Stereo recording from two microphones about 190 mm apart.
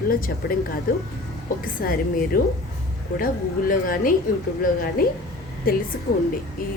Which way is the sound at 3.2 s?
50° left (ahead or behind).